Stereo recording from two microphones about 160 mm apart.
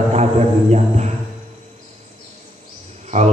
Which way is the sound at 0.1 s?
45° right (ahead or behind).